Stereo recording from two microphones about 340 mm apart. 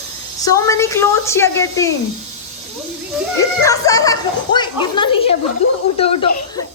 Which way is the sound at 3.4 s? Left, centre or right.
Centre.